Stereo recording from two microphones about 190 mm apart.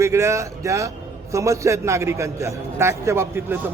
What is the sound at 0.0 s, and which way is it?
A man's voice, 15° right (ahead or behind).